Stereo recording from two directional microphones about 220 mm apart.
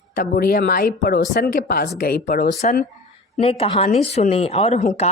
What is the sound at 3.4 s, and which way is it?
Speech, 25° left (ahead or behind).